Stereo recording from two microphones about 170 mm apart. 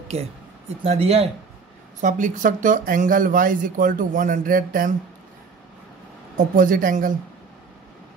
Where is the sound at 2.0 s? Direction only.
50° right (ahead or behind).